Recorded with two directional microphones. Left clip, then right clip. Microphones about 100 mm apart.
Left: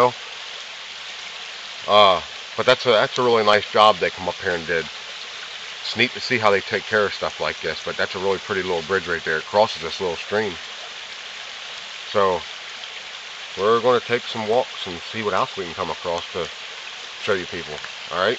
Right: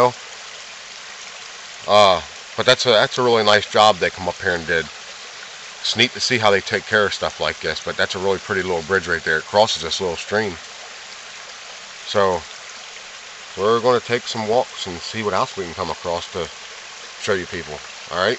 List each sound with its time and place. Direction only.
1.9 s speech: 30° right (ahead or behind)
5.9 s speech: 40° right (ahead or behind)
12.1 s speech: 35° right (ahead or behind)
13.6 s speech: 30° right (ahead or behind)